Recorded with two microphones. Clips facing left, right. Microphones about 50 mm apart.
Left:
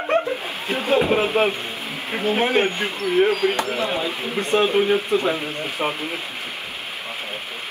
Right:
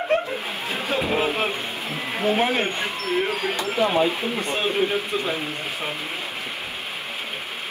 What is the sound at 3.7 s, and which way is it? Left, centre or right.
Speech, right.